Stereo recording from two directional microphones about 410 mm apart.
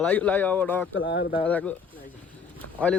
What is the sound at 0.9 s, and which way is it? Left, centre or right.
Speech, left.